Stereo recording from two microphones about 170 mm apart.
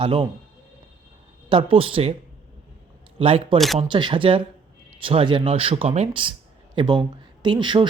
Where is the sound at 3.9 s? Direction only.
30° right (ahead or behind).